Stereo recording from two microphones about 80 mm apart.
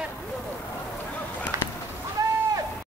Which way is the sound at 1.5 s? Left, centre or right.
Right.